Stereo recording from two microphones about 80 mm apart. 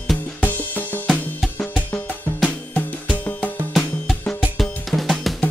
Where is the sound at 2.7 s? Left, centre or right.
Left.